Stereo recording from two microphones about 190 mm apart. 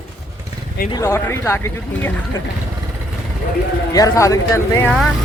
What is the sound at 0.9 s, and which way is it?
Speech, 15° left (ahead or behind).